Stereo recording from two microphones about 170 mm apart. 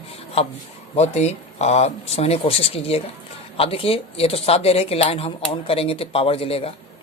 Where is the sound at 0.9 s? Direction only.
40° left (ahead or behind).